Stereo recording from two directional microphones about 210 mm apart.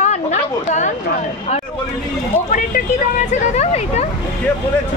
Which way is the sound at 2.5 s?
35° left (ahead or behind).